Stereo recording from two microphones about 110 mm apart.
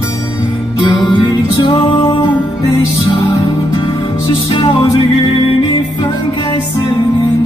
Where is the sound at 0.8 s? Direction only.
40° left (ahead or behind).